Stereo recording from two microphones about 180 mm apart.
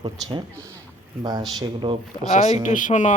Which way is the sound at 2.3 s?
40° left (ahead or behind).